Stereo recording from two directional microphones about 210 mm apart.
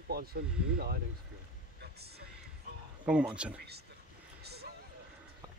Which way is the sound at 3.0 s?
5° right (ahead or behind).